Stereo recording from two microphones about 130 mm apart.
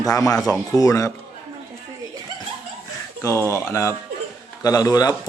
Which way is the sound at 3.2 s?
20° left (ahead or behind).